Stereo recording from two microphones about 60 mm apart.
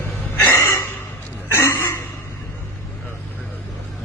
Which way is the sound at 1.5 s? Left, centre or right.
Left.